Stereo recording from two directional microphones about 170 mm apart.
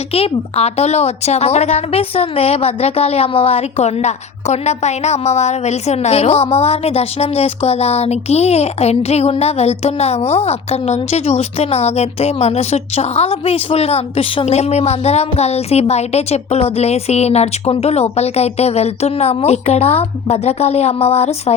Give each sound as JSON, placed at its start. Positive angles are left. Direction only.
{"t": 0.1, "sound": "speech", "side_deg": 35}